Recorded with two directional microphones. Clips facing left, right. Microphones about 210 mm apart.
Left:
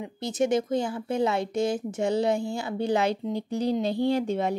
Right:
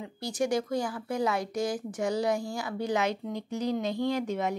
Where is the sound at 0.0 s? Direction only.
20° left (ahead or behind).